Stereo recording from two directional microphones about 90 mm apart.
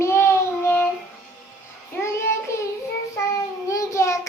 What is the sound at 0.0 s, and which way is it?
Child singing, 30° left (ahead or behind).